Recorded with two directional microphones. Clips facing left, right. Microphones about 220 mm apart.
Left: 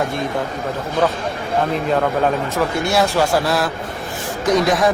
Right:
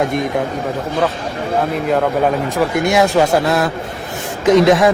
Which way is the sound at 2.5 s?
15° right (ahead or behind).